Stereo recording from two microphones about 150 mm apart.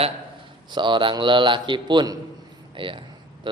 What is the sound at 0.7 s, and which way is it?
A man's voice, 30° right (ahead or behind).